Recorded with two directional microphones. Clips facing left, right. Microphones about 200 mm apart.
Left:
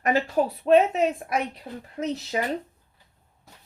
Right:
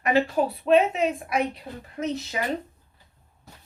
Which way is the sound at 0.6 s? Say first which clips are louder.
Left 1 dB; 40° left (ahead or behind).